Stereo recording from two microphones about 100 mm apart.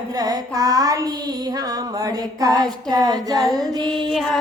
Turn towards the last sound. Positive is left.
turn(degrees=0)  # may be behind; listen again after turning